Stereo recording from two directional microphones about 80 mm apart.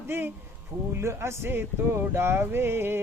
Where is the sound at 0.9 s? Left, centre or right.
Right.